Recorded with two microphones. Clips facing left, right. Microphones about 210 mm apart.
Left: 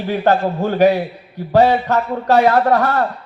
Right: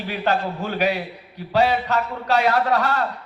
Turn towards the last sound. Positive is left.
turn(degrees=50)  # may be behind; listen again after turning